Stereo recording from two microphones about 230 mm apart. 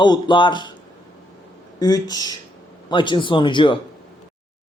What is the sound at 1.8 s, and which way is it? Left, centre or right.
Speech, centre.